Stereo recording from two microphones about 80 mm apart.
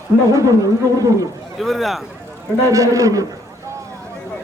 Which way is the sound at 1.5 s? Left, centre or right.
Centre.